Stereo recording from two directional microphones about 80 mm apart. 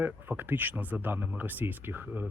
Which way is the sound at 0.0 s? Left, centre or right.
Right.